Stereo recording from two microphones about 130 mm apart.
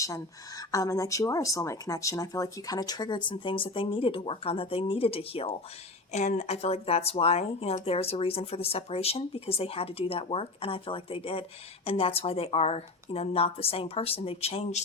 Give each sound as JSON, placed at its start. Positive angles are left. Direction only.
{"t": 0.0, "sound": "speech", "side_deg": 25}
{"t": 6.1, "sound": "a woman's voice", "side_deg": 60}